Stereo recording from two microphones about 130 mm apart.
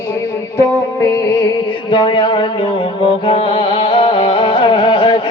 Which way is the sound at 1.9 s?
40° left (ahead or behind).